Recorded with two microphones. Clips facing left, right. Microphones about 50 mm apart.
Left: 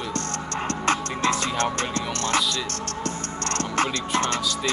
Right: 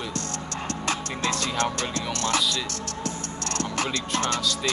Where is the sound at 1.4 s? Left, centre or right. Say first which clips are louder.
Left 2 dB; left.